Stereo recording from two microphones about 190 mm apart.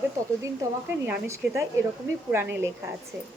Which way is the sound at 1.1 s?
15° right (ahead or behind).